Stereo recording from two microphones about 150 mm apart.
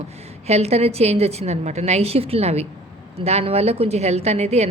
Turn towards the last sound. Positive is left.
turn(degrees=-45)  # may be behind; listen again after turning